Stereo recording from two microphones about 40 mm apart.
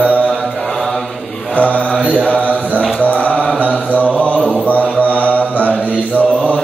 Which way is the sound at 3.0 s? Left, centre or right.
Left.